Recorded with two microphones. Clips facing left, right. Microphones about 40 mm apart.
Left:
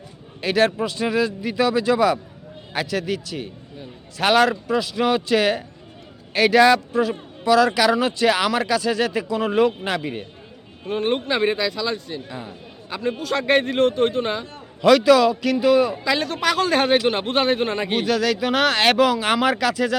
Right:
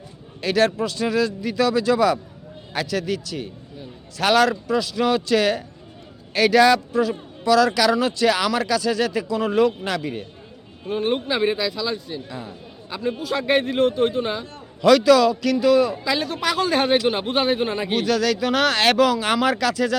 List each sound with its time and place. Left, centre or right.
0.4 s a man's voice: left
10.8 s a man's voice: left
12.3 s speech: left
12.9 s a man's voice: left
14.5 s speech: left
16.0 s a man's voice: left
17.9 s speech: left